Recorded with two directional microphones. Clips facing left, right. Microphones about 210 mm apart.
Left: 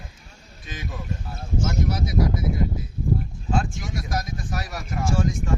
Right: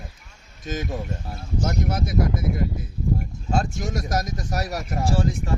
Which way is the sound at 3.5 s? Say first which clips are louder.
Right 2 dB; 40° right (ahead or behind).